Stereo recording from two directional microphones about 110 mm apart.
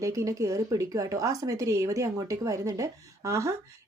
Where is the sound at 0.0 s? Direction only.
30° right (ahead or behind).